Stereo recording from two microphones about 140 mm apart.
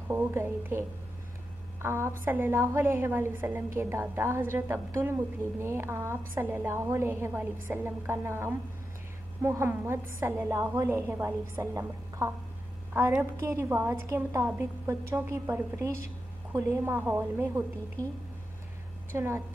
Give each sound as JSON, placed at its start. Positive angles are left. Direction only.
{"t": 0.1, "sound": "a woman's voice", "side_deg": -20}
{"t": 19.1, "sound": "a woman's voice", "side_deg": -20}